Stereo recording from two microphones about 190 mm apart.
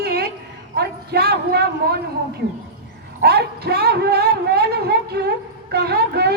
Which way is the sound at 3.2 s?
55° right (ahead or behind).